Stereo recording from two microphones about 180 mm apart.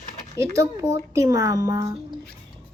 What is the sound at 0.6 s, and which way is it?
Speech, 15° right (ahead or behind).